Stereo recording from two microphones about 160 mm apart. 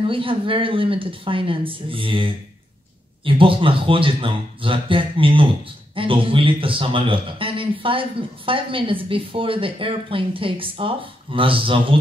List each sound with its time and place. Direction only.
0.0 s a man's voice: 35° right (ahead or behind)